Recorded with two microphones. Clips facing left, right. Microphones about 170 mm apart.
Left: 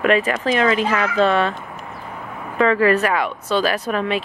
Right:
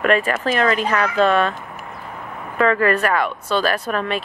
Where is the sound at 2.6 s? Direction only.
50° right (ahead or behind).